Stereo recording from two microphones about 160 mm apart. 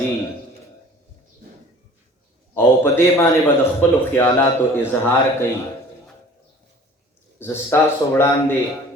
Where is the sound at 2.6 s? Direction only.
15° left (ahead or behind).